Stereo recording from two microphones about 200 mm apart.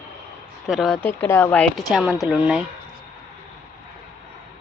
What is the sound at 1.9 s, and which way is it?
Speech, 5° right (ahead or behind).